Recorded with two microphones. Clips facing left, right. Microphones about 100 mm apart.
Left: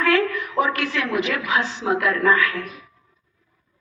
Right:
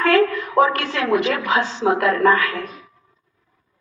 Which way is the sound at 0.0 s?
55° right (ahead or behind).